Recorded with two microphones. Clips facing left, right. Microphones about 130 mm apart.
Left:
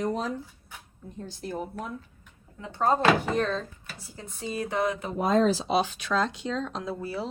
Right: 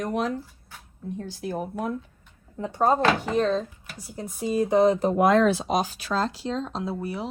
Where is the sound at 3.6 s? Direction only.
15° right (ahead or behind).